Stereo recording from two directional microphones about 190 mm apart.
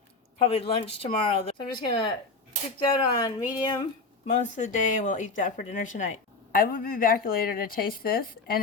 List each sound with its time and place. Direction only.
0.4 s speech: 30° left (ahead or behind)
4.3 s speech: 40° left (ahead or behind)